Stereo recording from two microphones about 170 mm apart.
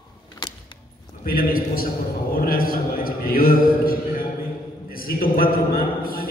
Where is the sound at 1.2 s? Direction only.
60° left (ahead or behind).